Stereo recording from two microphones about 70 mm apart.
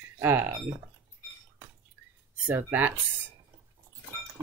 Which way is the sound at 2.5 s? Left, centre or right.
Right.